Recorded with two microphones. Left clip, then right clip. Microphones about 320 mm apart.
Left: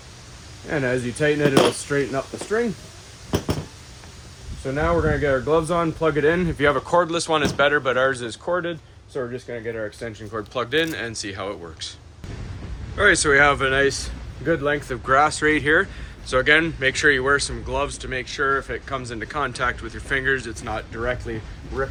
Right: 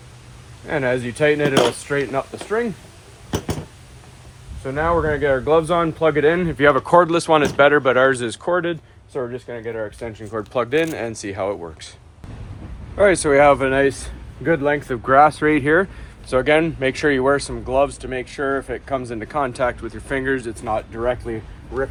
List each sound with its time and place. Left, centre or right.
0.7 s speech: centre
4.6 s speech: centre
9.5 s speech: centre
13.0 s speech: centre